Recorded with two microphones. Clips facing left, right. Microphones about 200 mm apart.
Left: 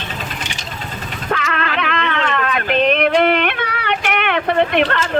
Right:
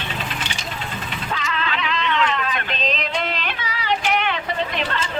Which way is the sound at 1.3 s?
60° left (ahead or behind).